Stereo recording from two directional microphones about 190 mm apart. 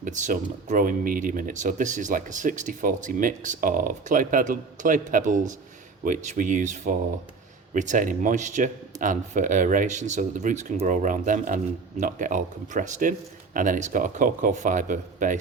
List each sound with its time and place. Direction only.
0.0 s speech: 40° right (ahead or behind)